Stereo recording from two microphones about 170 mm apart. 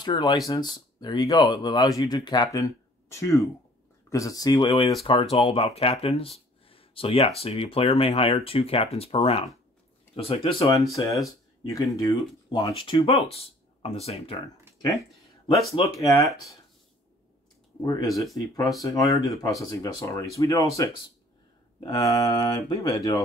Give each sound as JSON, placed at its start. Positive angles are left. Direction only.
{"t": 0.0, "sound": "speech", "side_deg": 25}
{"t": 10.8, "sound": "speech", "side_deg": 20}
{"t": 14.8, "sound": "a sound", "side_deg": 20}
{"t": 17.8, "sound": "speech", "side_deg": 20}